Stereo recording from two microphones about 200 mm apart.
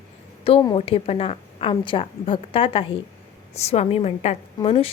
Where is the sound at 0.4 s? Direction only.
25° left (ahead or behind).